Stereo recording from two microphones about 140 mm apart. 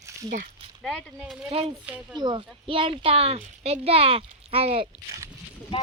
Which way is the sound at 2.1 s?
30° right (ahead or behind).